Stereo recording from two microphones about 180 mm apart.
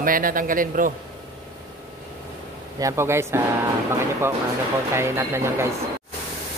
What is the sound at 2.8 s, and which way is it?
Speech, 15° right (ahead or behind).